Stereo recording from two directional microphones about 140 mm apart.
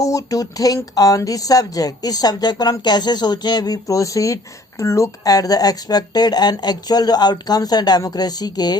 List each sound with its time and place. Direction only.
0.0 s speech: 25° left (ahead or behind)